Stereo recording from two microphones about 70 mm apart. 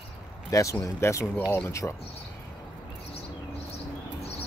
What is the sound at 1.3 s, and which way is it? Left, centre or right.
Speech, left.